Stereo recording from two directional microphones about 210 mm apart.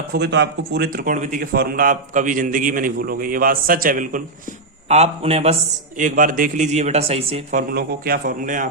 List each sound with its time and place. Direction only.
0.1 s a man's voice: 55° right (ahead or behind); by 7.6 s 30° right (ahead or behind)
7.7 s speech: 45° right (ahead or behind)